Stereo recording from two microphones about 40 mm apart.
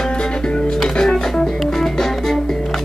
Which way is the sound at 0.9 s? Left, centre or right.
Centre.